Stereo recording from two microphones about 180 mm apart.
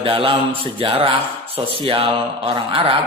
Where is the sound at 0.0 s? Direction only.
30° right (ahead or behind).